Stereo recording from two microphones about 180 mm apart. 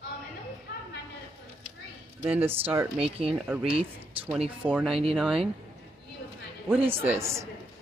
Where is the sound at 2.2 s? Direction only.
10° right (ahead or behind).